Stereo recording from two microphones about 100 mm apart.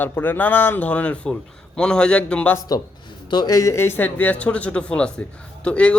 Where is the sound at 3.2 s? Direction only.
45° left (ahead or behind).